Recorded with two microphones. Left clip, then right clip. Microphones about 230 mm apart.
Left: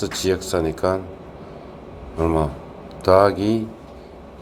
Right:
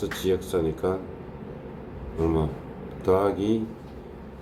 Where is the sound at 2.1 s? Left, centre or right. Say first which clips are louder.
Left 5 dB; centre.